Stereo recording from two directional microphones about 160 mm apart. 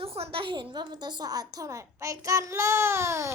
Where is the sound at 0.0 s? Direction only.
35° right (ahead or behind).